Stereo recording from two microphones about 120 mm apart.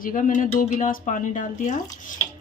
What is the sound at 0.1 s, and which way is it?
Speech, 90° left.